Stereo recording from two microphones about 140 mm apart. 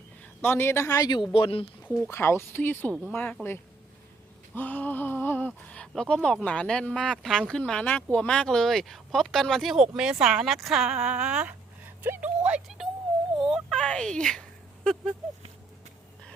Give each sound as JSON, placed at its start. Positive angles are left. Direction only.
{"t": 0.4, "sound": "a woman's voice", "side_deg": 15}
{"t": 1.3, "sound": "speech", "side_deg": 40}
{"t": 2.0, "sound": "speech", "side_deg": 20}
{"t": 4.5, "sound": "a sound", "side_deg": 10}
{"t": 5.6, "sound": "speech", "side_deg": 5}
{"t": 12.0, "sound": "a sound", "side_deg": -15}
{"t": 13.4, "sound": "speech", "side_deg": 0}